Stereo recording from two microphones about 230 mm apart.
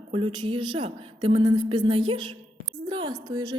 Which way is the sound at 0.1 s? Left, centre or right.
Right.